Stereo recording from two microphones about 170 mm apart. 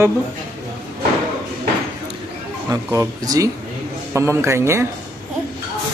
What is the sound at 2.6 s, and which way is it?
Speech, 20° right (ahead or behind).